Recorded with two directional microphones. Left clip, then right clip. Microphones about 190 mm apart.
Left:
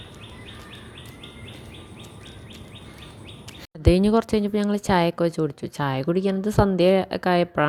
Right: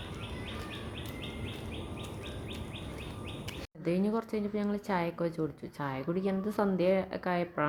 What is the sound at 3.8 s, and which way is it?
Speech, 45° left (ahead or behind).